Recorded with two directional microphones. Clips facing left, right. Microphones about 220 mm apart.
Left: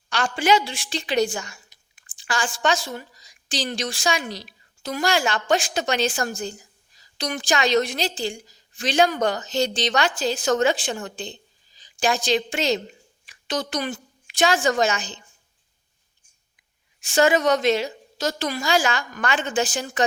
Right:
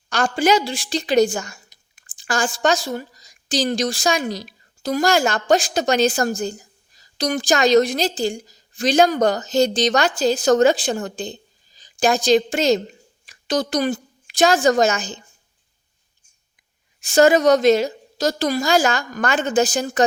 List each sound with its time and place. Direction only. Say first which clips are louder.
0.1 s a woman's voice: right 3 dB; 40° right (ahead or behind)
17.0 s a woman's voice: right 5 dB; 40° right (ahead or behind)